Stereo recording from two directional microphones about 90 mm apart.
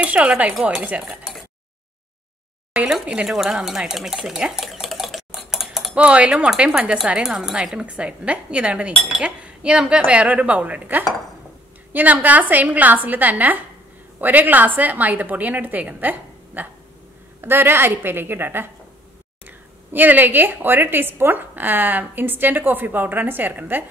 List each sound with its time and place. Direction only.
0.0 s speech: 15° right (ahead or behind)
2.7 s stir: 10° right (ahead or behind)
5.9 s a woman's voice: 15° right (ahead or behind)